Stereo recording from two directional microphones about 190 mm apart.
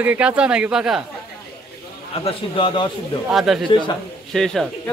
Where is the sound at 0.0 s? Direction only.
10° right (ahead or behind).